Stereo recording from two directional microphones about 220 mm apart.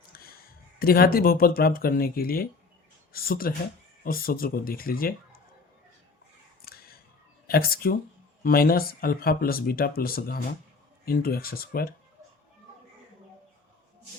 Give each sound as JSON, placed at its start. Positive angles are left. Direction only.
{"t": 0.1, "sound": "a sound", "side_deg": 45}
{"t": 0.8, "sound": "speech", "side_deg": 45}
{"t": 6.6, "sound": "scissors", "side_deg": 45}
{"t": 7.4, "sound": "speech", "side_deg": 45}